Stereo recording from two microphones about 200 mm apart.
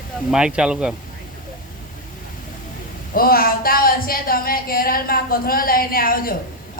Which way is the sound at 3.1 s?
45° left (ahead or behind).